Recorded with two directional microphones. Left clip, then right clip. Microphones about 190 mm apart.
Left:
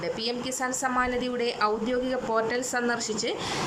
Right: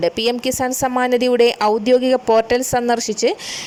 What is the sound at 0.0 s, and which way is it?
A woman's voice, 40° right (ahead or behind).